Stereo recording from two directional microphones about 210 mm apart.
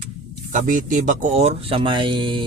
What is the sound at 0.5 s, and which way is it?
Speech, 40° right (ahead or behind).